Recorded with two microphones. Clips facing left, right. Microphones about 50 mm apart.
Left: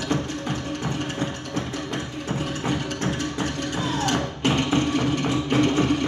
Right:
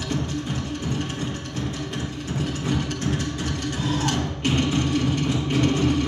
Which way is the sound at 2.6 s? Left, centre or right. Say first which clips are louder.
Left 1 dB; left.